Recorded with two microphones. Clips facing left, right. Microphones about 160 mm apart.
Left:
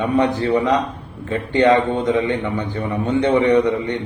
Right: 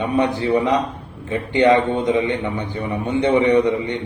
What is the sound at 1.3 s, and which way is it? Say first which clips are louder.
A man's voice: even; 15° right (ahead or behind).